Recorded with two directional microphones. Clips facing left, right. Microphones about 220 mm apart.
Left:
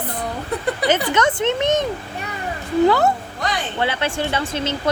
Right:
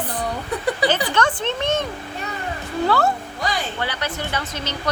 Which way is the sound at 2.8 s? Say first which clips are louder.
Left 2 dB; 20° left (ahead or behind).